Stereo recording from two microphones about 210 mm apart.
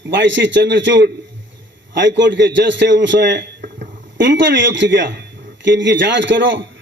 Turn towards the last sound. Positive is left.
turn(degrees=-60)  # may be behind; listen again after turning